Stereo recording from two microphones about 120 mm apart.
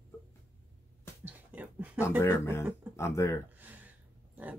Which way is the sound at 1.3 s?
15° right (ahead or behind).